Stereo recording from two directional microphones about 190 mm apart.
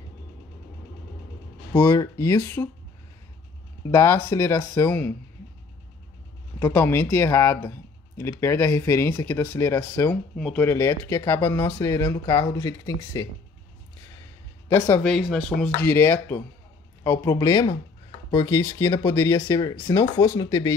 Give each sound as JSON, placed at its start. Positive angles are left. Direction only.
{"t": 1.7, "sound": "speech", "side_deg": 15}
{"t": 3.9, "sound": "speech", "side_deg": 15}
{"t": 6.6, "sound": "speech", "side_deg": 10}
{"t": 14.7, "sound": "speech", "side_deg": 15}
{"t": 15.0, "sound": "speech", "side_deg": 0}